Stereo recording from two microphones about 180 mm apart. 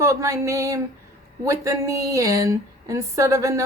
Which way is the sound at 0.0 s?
15° right (ahead or behind).